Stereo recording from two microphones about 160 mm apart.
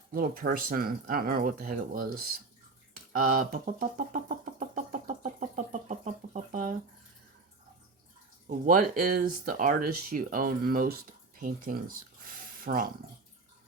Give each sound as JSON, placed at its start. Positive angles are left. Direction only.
{"t": 0.1, "sound": "speech", "side_deg": -65}
{"t": 3.1, "sound": "a sound", "side_deg": -60}
{"t": 8.4, "sound": "speech", "side_deg": -60}